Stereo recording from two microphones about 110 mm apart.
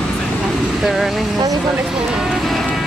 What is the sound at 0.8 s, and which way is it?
Vehicle, centre (ahead or behind).